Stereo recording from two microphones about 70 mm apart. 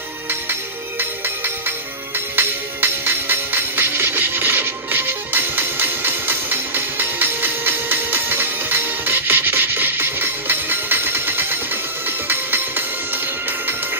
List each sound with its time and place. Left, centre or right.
0.3 s music: right